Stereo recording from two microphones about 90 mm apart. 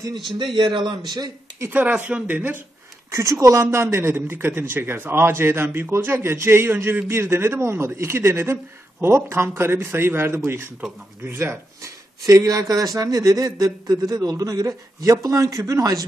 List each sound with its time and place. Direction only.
0.6 s a man's voice: 65° right (ahead or behind)
1.7 s speech: 15° right (ahead or behind)
3.1 s a man's voice: 30° right (ahead or behind)